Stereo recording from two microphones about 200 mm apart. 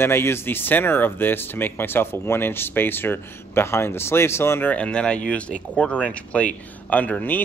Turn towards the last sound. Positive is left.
turn(degrees=5)  # may be behind; listen again after turning